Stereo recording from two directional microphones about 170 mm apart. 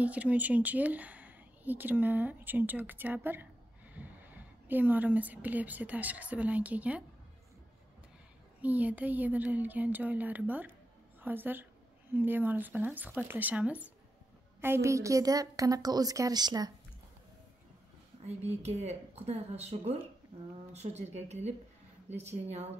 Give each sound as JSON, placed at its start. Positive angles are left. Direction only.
{"t": 0.0, "sound": "speech", "side_deg": -10}
{"t": 8.5, "sound": "a woman's voice", "side_deg": -10}
{"t": 18.2, "sound": "a woman's voice", "side_deg": -40}